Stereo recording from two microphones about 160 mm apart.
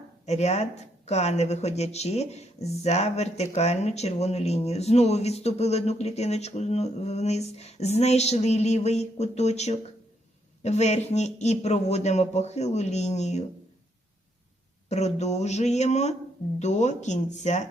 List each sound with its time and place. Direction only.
0.3 s speech: 40° left (ahead or behind)
14.8 s speech: 45° left (ahead or behind)